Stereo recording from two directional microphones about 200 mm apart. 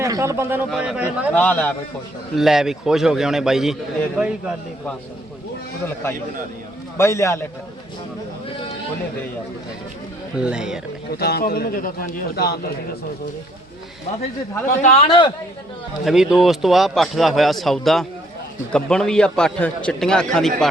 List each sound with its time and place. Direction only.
0.0 s a man's voice: 15° right (ahead or behind)
1.4 s a man's voice: 10° left (ahead or behind)
5.8 s a man's voice: 10° left (ahead or behind)
10.3 s a man's voice: 5° right (ahead or behind)
11.1 s a man's voice: 50° left (ahead or behind)
14.8 s a man's voice: 35° left (ahead or behind)
16.0 s a man's voice: 5° right (ahead or behind)